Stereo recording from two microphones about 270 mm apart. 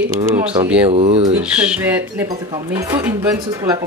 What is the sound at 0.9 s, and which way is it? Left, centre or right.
Speech, right.